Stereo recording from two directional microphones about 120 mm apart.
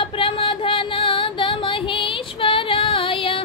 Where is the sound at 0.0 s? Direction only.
45° left (ahead or behind).